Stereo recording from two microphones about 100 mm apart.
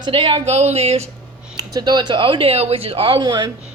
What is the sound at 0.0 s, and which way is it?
Speech, 60° right (ahead or behind).